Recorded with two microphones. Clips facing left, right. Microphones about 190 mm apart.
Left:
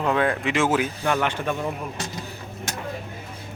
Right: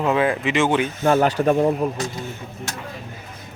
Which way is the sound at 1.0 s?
35° right (ahead or behind).